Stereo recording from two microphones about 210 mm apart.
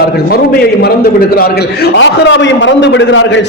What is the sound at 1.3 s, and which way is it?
A man's voice, 45° left (ahead or behind).